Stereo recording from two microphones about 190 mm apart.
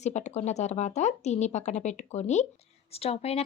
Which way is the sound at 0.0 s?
35° left (ahead or behind).